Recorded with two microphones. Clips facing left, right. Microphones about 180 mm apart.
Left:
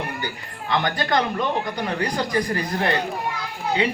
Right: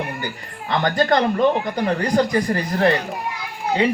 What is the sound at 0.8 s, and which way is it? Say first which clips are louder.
Speech: right 5 dB; 45° right (ahead or behind).